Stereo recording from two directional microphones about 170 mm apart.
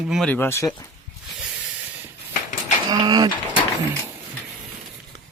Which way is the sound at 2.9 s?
25° right (ahead or behind).